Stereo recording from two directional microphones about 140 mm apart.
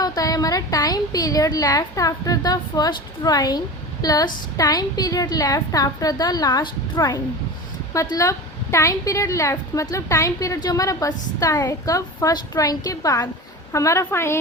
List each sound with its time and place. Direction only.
0.0 s a woman's voice: 25° left (ahead or behind)